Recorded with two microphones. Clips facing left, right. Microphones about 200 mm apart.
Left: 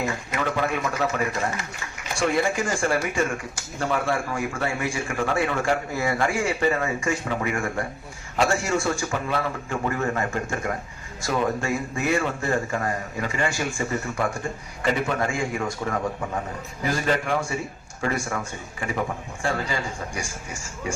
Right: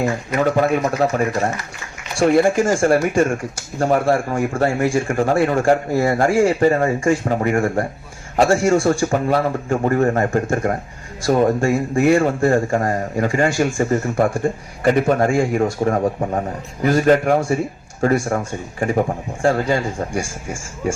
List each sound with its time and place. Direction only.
0.0 s speech: 45° right (ahead or behind)
2.4 s speech: 50° right (ahead or behind)
11.9 s speech: 55° right (ahead or behind)
12.5 s speech: 40° right (ahead or behind)